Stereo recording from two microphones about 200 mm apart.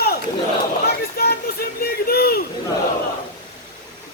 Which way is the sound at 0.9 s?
50° left (ahead or behind).